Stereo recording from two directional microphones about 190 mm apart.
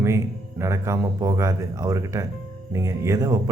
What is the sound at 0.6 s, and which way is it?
A man's voice, 15° right (ahead or behind).